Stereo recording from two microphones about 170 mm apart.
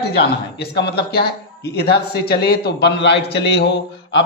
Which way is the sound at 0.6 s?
70° left (ahead or behind).